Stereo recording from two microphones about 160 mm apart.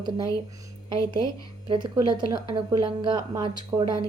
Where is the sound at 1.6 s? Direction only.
30° right (ahead or behind).